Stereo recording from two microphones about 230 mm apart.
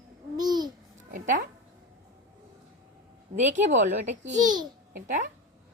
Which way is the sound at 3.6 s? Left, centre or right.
Right.